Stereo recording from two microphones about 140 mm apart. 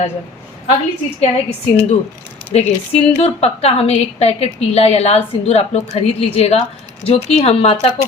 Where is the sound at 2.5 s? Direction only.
50° left (ahead or behind).